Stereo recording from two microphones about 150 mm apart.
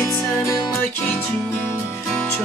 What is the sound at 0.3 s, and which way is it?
Music, 15° left (ahead or behind).